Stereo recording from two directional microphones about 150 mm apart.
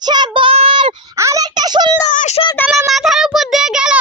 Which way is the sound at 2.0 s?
55° left (ahead or behind).